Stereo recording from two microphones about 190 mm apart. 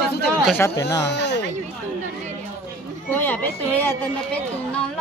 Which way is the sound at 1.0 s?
65° left (ahead or behind).